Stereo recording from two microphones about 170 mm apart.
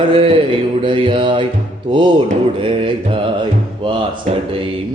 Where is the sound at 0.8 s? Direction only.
30° right (ahead or behind).